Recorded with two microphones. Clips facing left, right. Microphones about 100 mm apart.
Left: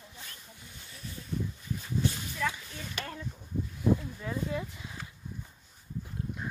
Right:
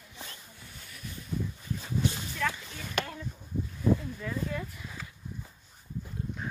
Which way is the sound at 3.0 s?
65° right (ahead or behind).